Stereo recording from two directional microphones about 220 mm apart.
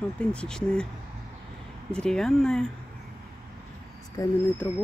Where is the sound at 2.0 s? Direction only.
5° left (ahead or behind).